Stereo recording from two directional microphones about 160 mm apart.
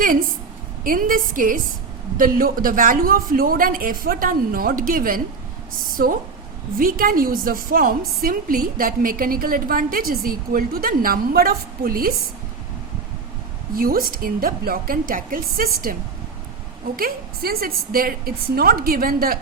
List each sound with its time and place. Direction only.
0.9 s a woman's voice: 60° right (ahead or behind)
6.7 s a woman's voice: 60° right (ahead or behind)
13.7 s a woman's voice: 65° right (ahead or behind)
17.0 s a woman's voice: 70° right (ahead or behind)